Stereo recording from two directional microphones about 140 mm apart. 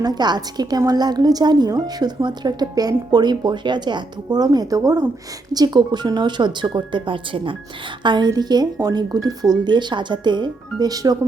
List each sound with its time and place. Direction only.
0.0 s a woman's voice: 30° right (ahead or behind)